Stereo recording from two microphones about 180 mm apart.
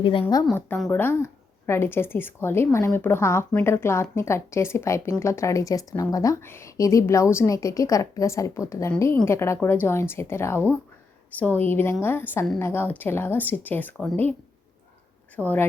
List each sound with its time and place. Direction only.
0.0 s a woman's voice: 30° left (ahead or behind)
0.9 s speech: 10° left (ahead or behind)
15.4 s speech: 10° left (ahead or behind)